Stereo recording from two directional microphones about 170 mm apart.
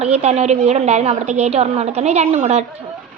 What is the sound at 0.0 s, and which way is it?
A woman's voice, 40° right (ahead or behind).